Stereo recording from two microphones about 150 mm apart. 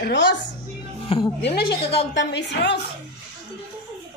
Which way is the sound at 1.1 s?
35° left (ahead or behind).